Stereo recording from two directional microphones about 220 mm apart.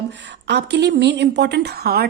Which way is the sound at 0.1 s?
50° right (ahead or behind).